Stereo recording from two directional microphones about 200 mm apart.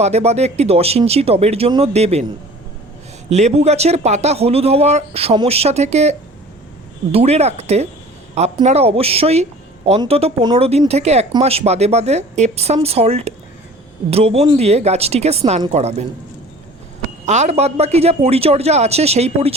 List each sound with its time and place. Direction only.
0.0 s speech: 30° right (ahead or behind)
17.2 s speech: 35° right (ahead or behind)